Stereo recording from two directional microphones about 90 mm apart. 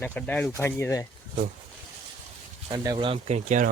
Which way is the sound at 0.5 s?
30° left (ahead or behind).